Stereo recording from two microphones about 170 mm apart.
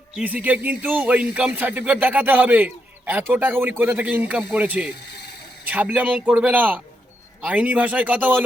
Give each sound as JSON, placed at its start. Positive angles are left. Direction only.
{"t": 0.2, "sound": "speech", "side_deg": -10}